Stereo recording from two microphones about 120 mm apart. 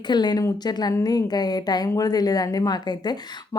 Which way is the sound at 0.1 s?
35° left (ahead or behind).